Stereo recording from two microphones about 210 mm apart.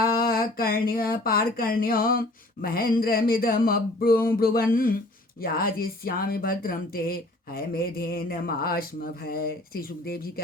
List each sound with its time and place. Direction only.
0.0 s speech: 45° left (ahead or behind)